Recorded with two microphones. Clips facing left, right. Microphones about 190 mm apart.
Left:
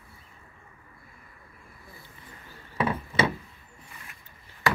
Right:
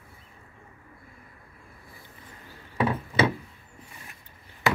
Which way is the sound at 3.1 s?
35° right (ahead or behind).